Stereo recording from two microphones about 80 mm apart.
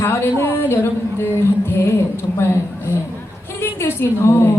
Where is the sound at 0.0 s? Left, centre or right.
Left.